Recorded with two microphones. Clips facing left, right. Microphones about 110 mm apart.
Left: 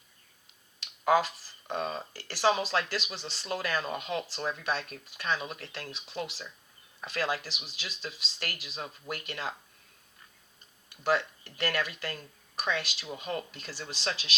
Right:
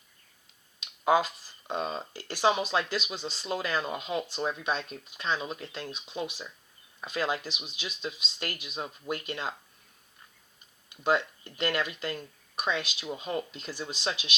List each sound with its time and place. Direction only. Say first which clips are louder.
1.0 s speech: right 1 dB; 20° right (ahead or behind)
10.8 s speech: right 1 dB; 20° right (ahead or behind)